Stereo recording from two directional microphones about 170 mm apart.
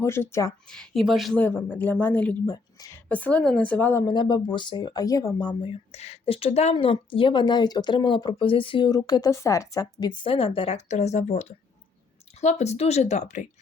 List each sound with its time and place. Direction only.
0.0 s speech: 15° left (ahead or behind)
0.7 s speech: centre (ahead or behind)
1.5 s speech: 10° left (ahead or behind)
2.5 s speech: 20° left (ahead or behind)
3.1 s speech: 10° left (ahead or behind)
4.0 s speech: 25° left (ahead or behind)
5.7 s a woman's voice: 40° left (ahead or behind)